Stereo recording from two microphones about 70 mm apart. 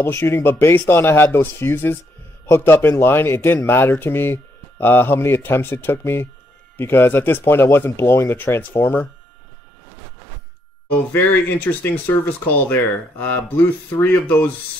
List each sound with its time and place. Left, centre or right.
0.0 s speech: left
11.1 s speech: left